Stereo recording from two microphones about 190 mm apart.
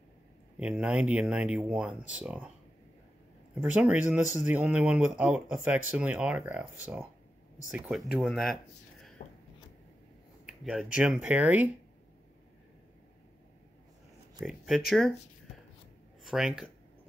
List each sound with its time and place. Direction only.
0.6 s speech: 5° right (ahead or behind)
3.5 s speech: 10° right (ahead or behind)
9.2 s a sound: 40° left (ahead or behind)
10.4 s a sound: 5° right (ahead or behind)
11.0 s speech: 5° right (ahead or behind)
14.4 s speech: centre (ahead or behind)
16.3 s speech: centre (ahead or behind)